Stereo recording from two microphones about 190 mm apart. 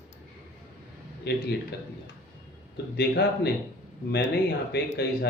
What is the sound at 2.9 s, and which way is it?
Speech, 60° left (ahead or behind).